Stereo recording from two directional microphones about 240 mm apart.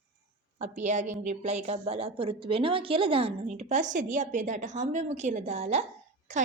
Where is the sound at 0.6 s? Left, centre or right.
Right.